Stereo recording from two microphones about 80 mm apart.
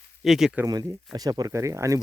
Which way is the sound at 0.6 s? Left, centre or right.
Right.